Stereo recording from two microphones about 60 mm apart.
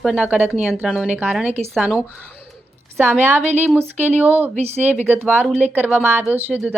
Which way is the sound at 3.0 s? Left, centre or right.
Right.